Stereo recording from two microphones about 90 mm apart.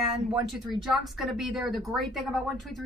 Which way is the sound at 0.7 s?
5° right (ahead or behind).